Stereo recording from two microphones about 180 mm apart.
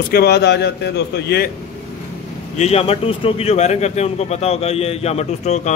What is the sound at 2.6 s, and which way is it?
A man's voice, 35° left (ahead or behind).